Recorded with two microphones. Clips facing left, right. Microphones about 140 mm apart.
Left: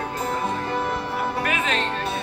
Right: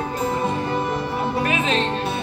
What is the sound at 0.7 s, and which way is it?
Music, 15° right (ahead or behind).